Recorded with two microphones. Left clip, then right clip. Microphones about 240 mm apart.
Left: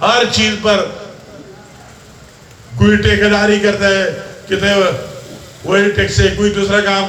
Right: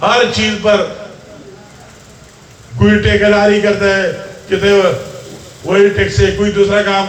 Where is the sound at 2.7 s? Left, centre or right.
Left.